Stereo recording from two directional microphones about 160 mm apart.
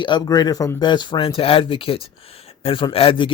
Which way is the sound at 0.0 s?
25° left (ahead or behind).